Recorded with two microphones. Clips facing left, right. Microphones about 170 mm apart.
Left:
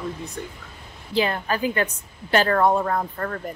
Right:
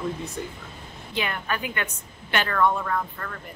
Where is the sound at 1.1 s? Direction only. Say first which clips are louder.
Left 6 dB; 35° left (ahead or behind).